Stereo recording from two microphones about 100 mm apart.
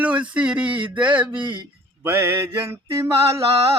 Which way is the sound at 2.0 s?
25° right (ahead or behind).